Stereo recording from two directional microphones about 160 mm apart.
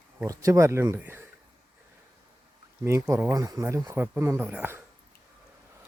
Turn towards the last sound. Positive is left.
turn(degrees=-10)  # may be behind; listen again after turning